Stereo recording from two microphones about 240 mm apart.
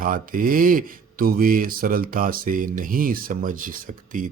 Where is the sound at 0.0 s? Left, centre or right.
Right.